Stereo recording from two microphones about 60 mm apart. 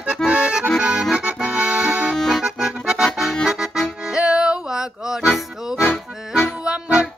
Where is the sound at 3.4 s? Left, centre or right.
Centre.